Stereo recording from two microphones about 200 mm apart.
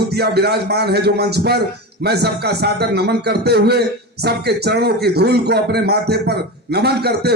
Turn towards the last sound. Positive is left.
turn(degrees=-55)  # may be behind; listen again after turning